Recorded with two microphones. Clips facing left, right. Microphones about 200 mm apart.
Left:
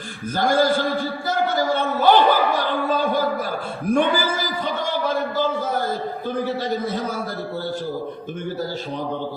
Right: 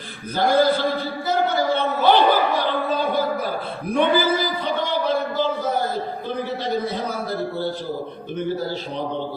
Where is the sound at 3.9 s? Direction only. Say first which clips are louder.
Right 1 dB; 45° left (ahead or behind).